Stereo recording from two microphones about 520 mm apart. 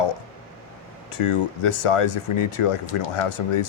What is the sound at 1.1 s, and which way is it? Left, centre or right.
Speech, left.